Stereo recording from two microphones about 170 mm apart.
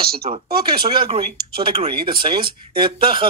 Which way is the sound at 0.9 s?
30° right (ahead or behind).